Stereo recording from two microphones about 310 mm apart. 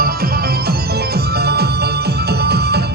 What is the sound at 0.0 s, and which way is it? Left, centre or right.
Music, right.